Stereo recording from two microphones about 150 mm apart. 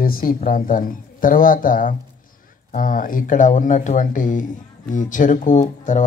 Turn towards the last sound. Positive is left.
turn(degrees=55)  # may be behind; listen again after turning